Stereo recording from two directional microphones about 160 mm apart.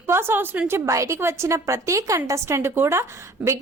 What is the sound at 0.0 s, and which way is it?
A woman's voice, 15° right (ahead or behind).